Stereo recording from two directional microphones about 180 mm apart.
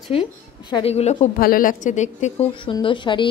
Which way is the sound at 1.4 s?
50° left (ahead or behind).